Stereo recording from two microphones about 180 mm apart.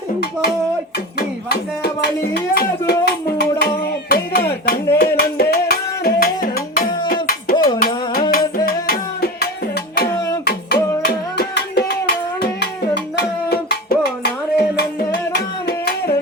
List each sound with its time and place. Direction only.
1.5 s music: 60° left (ahead or behind)
3.6 s a sound: 55° left (ahead or behind)
4.9 s music: 55° left (ahead or behind)
7.1 s a sound: 55° left (ahead or behind)
7.5 s music: 20° left (ahead or behind)
7.8 s music: 50° left (ahead or behind)
10.1 s music: 15° left (ahead or behind)
10.4 s a sound: 60° left (ahead or behind)
13.1 s music: 60° left (ahead or behind)